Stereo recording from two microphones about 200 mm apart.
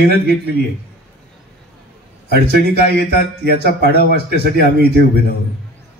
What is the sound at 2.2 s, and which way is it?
Speech, 55° right (ahead or behind).